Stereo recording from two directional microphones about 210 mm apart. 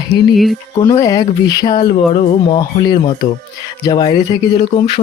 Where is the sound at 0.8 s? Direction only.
15° left (ahead or behind).